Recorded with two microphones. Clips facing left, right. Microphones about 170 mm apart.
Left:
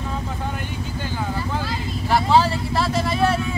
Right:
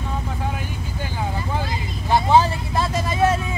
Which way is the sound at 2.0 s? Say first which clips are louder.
Right 1 dB; 20° right (ahead or behind).